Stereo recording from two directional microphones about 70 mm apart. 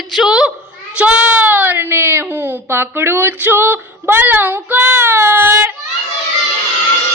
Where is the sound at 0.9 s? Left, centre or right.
Centre.